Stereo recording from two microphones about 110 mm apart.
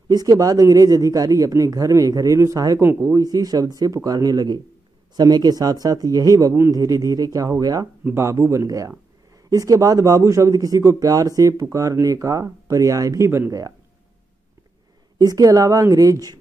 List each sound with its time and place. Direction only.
0.1 s speech: 35° right (ahead or behind)
8.0 s speech: 25° right (ahead or behind)
15.1 s speech: 30° right (ahead or behind)